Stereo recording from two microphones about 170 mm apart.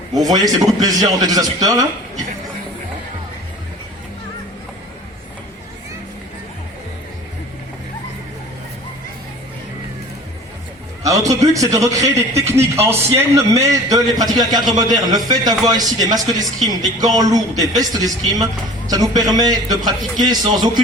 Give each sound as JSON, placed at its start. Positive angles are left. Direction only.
{"t": 0.1, "sound": "a man's voice", "side_deg": -20}
{"t": 11.0, "sound": "a man's voice", "side_deg": -20}